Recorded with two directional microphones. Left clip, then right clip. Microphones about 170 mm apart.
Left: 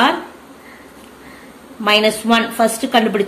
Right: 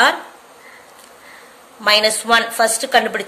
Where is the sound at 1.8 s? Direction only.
40° right (ahead or behind).